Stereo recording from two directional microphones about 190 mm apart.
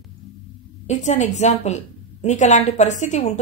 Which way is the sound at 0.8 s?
35° left (ahead or behind).